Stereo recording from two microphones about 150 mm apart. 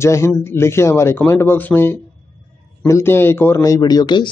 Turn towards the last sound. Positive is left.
turn(degrees=30)  # may be behind; listen again after turning